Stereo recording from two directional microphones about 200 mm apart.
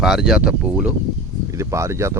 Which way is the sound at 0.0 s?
Centre (ahead or behind).